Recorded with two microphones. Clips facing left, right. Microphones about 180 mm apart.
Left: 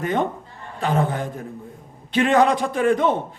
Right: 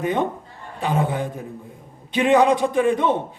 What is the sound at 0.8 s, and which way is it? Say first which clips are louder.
A man's voice: even; 15° right (ahead or behind).